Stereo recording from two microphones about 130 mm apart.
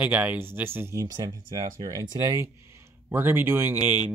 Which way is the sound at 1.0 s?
30° right (ahead or behind).